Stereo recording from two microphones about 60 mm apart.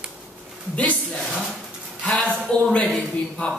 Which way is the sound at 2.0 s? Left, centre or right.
Left.